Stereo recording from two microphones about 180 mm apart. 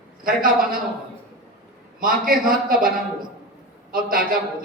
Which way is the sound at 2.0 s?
50° right (ahead or behind).